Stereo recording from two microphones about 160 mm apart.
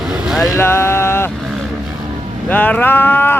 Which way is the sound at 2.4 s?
10° left (ahead or behind).